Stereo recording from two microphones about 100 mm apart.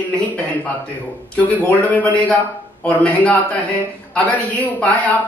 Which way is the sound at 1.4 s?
15° left (ahead or behind).